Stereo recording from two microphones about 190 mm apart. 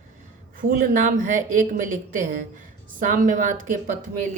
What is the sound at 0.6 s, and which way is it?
Speech, 45° right (ahead or behind).